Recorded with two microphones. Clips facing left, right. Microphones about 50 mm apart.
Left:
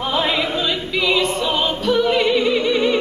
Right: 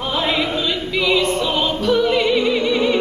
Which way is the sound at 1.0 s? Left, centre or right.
Centre.